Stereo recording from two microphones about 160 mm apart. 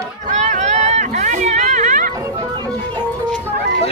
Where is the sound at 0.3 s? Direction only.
50° right (ahead or behind).